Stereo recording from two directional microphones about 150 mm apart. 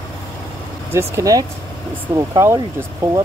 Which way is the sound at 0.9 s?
20° right (ahead or behind).